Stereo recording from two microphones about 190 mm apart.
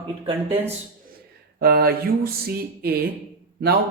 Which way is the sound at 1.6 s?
55° right (ahead or behind).